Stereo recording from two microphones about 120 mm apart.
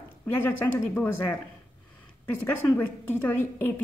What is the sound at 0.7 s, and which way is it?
A woman's voice, 20° left (ahead or behind).